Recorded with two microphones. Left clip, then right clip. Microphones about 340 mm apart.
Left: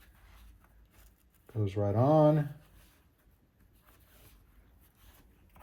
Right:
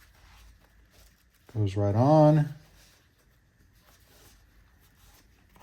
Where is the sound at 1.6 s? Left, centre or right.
Right.